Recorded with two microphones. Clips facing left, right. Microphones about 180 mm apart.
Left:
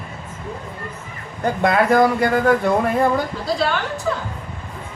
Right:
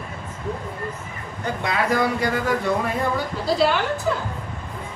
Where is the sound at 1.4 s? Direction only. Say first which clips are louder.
Left 7 dB; 55° left (ahead or behind).